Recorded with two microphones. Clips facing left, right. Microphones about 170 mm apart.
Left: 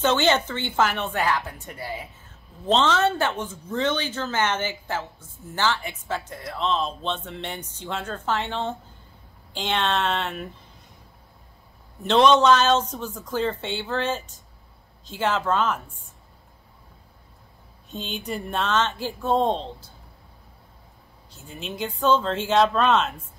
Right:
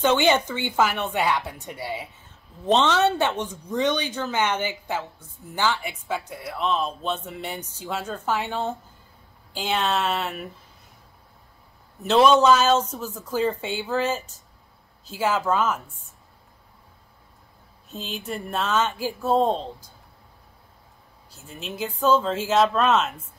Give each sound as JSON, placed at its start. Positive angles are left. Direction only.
{"t": 0.0, "sound": "speech", "side_deg": -10}
{"t": 12.0, "sound": "speech", "side_deg": -5}
{"t": 17.8, "sound": "speech", "side_deg": 0}
{"t": 21.3, "sound": "speech", "side_deg": 0}